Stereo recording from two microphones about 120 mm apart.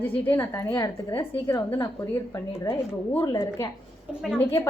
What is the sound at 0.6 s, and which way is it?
Speech, 30° left (ahead or behind).